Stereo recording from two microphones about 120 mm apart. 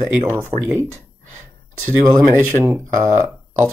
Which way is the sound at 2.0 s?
20° right (ahead or behind).